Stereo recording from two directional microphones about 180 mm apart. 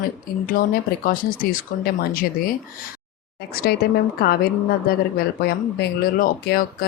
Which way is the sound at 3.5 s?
60° left (ahead or behind).